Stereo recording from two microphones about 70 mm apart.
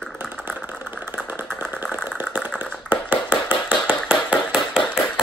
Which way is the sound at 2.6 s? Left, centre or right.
Centre.